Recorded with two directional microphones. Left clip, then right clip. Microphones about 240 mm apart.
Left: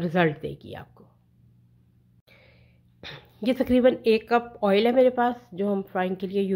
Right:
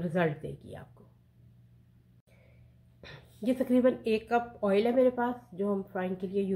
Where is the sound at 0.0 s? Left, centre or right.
Left.